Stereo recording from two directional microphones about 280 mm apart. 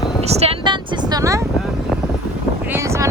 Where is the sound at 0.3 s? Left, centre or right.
Centre.